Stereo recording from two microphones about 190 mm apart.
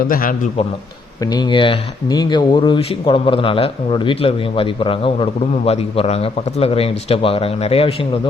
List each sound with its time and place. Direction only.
0.0 s a man's voice: 45° left (ahead or behind)
1.2 s speech: 20° left (ahead or behind)